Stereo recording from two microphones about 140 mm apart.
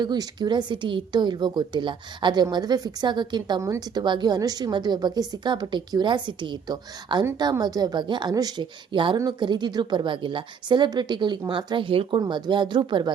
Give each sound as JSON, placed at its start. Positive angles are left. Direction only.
{"t": 0.0, "sound": "a woman's voice", "side_deg": -30}